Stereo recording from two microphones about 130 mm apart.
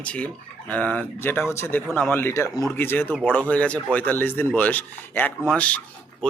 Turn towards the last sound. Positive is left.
turn(degrees=10)  # may be behind; listen again after turning